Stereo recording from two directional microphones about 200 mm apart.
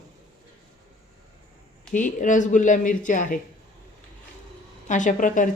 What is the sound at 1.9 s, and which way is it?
Speech, 40° left (ahead or behind).